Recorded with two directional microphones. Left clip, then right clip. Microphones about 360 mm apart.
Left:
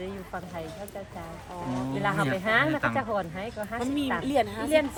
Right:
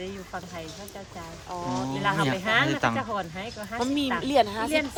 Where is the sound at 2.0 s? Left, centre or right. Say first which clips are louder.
Right 1 dB; centre.